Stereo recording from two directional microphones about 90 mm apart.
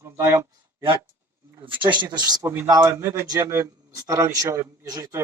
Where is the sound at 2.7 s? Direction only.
40° right (ahead or behind).